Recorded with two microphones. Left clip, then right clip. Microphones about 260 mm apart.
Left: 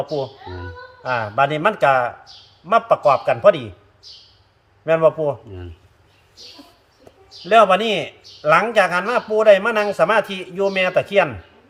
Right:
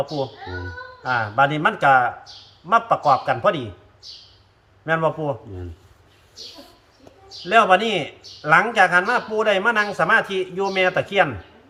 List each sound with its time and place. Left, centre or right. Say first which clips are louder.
1.0 s a man's voice: even; left
4.9 s a man's voice: left 6 dB; left
7.4 s a man's voice: left 2 dB; left